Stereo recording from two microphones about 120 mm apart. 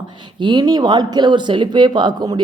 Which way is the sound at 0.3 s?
40° right (ahead or behind).